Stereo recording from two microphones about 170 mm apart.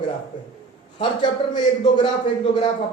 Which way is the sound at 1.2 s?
25° left (ahead or behind).